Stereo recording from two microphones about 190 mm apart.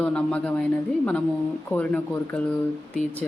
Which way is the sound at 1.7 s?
5° left (ahead or behind).